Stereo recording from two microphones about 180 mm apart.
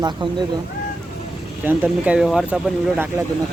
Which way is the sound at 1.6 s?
10° right (ahead or behind).